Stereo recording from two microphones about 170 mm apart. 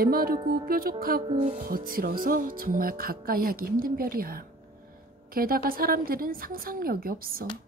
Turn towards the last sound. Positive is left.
turn(degrees=-60)  # may be behind; listen again after turning